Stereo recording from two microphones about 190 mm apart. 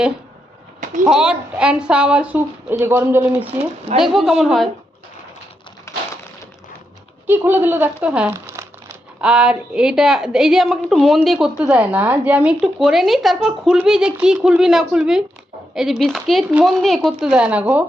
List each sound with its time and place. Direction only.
1.0 s speech: 5° right (ahead or behind)
3.9 s a woman's voice: centre (ahead or behind)
5.9 s a sound: 15° left (ahead or behind)
7.3 s a woman's voice: 10° right (ahead or behind)